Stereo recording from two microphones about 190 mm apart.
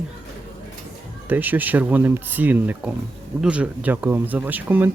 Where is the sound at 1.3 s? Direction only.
10° right (ahead or behind).